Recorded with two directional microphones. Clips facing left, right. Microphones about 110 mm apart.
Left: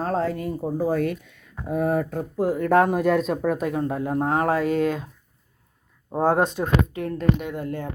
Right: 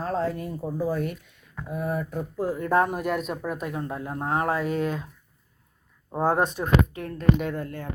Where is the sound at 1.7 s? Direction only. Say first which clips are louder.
Left 6 dB; 75° left (ahead or behind).